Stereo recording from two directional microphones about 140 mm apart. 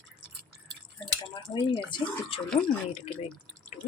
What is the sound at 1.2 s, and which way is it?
Speech, 35° left (ahead or behind).